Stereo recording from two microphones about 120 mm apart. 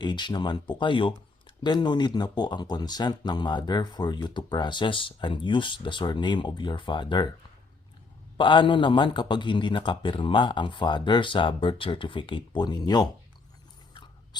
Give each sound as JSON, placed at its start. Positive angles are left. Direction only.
{"t": 0.0, "sound": "speech", "side_deg": 40}
{"t": 8.4, "sound": "a man's voice", "side_deg": 45}